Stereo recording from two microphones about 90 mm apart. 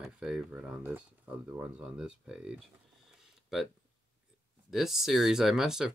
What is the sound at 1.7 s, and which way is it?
Speech, 10° right (ahead or behind).